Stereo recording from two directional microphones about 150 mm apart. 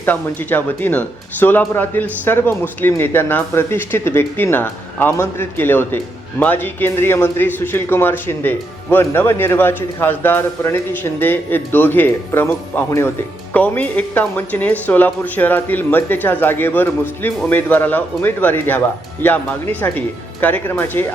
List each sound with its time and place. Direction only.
0.0 s speech: 10° left (ahead or behind)